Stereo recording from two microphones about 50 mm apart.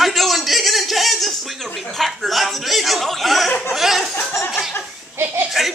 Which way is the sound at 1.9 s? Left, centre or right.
Centre.